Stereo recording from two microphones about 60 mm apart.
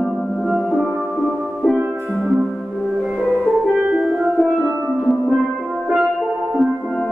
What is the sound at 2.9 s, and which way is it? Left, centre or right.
Music, centre.